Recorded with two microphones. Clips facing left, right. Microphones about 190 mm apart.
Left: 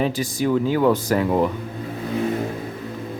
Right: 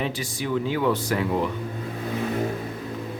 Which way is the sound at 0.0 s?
40° left (ahead or behind).